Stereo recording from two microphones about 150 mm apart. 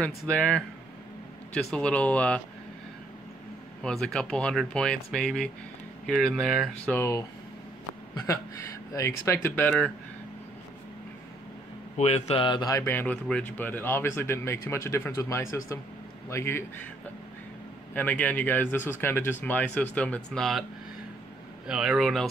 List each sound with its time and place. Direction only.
0.0 s a man's voice: 5° left (ahead or behind)
3.8 s speech: 5° left (ahead or behind)
6.9 s a man's voice: 20° left (ahead or behind)
12.0 s speech: 45° left (ahead or behind)
12.4 s a man's voice: 25° left (ahead or behind)
17.9 s a man's voice: 10° left (ahead or behind)
21.6 s speech: 5° right (ahead or behind)